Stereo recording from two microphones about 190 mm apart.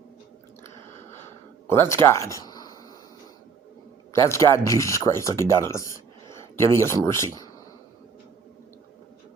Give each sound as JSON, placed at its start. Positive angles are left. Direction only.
{"t": 1.6, "sound": "speech", "side_deg": 10}
{"t": 4.1, "sound": "speech", "side_deg": 15}